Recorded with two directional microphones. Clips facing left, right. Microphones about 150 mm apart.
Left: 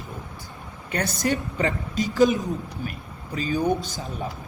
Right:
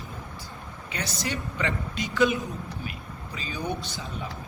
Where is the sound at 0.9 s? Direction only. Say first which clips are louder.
Left 7 dB; 50° left (ahead or behind).